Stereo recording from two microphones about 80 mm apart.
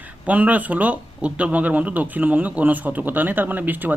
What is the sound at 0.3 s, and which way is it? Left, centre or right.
Speech, centre.